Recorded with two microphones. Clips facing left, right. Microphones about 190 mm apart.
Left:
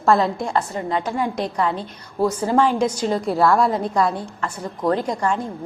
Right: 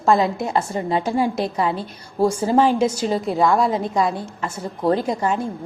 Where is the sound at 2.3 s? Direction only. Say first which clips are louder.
Right 1 dB; 25° right (ahead or behind).